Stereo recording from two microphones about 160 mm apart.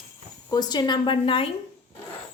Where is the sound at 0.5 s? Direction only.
25° left (ahead or behind).